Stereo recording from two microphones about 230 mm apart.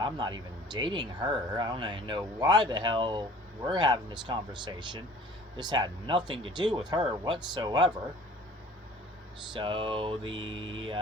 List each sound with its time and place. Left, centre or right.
0.0 s speech: centre
9.5 s speech: right